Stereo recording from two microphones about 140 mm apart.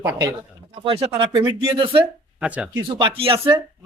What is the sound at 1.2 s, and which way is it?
Speech, 30° right (ahead or behind).